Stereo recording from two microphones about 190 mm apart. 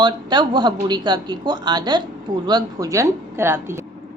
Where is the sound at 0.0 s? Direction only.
25° right (ahead or behind).